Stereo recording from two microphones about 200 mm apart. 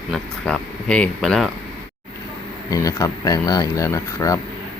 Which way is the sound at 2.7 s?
15° left (ahead or behind).